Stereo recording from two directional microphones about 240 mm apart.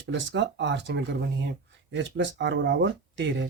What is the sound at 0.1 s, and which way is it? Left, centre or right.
Speech, right.